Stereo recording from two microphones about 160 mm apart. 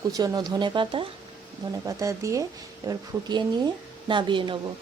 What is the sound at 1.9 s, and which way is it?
A woman's voice, 20° right (ahead or behind).